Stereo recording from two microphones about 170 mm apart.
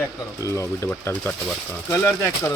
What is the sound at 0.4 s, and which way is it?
Speech, 15° left (ahead or behind).